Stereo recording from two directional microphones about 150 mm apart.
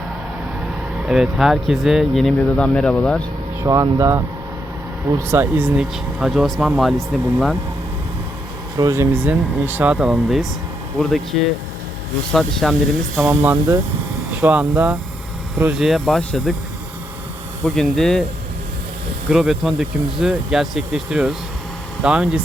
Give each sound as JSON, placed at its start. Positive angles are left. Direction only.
{"t": 1.0, "sound": "speech", "side_deg": -5}
{"t": 3.6, "sound": "speech", "side_deg": -25}
{"t": 5.3, "sound": "speech", "side_deg": -10}
{"t": 8.8, "sound": "speech", "side_deg": -20}
{"t": 12.3, "sound": "speech", "side_deg": 5}
{"t": 13.2, "sound": "speech", "side_deg": -15}
{"t": 17.7, "sound": "speech", "side_deg": 5}
{"t": 19.3, "sound": "speech", "side_deg": -5}